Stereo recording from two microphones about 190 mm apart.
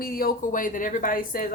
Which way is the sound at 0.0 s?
50° left (ahead or behind).